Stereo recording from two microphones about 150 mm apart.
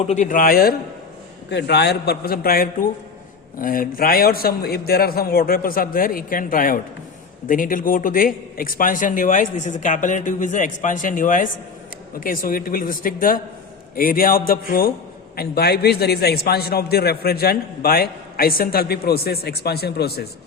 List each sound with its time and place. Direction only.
0.0 s a man's voice: 50° left (ahead or behind); by 14.9 s 80° left
15.4 s a man's voice: 90° left